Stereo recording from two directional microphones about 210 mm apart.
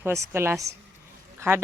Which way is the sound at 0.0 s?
10° right (ahead or behind).